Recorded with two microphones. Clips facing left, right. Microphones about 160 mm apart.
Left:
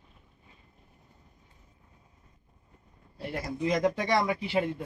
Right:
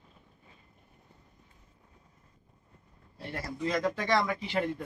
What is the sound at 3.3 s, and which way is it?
Speech, 15° left (ahead or behind).